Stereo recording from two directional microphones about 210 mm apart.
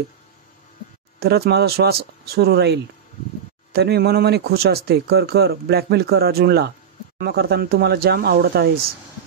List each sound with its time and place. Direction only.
1.2 s a man's voice: 50° right (ahead or behind)